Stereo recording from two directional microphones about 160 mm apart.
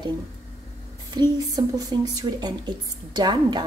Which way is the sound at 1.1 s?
25° right (ahead or behind).